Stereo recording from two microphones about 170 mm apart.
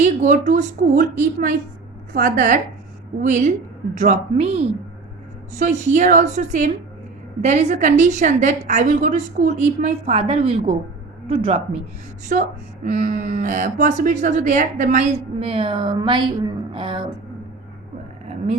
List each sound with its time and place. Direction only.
0.0 s a woman's voice: 45° right (ahead or behind)
12.3 s a woman's voice: 50° right (ahead or behind)
15.4 s a woman's voice: 35° right (ahead or behind)